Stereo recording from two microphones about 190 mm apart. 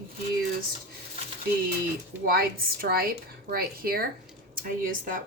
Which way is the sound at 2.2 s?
50° right (ahead or behind).